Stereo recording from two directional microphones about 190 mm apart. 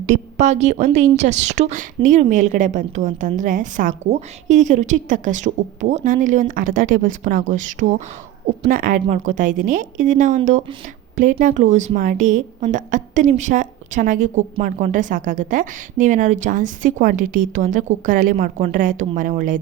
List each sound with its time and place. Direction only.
0.0 s a woman's voice: 35° right (ahead or behind)